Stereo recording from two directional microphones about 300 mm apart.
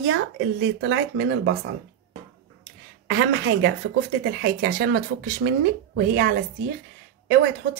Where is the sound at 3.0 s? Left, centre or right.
Right.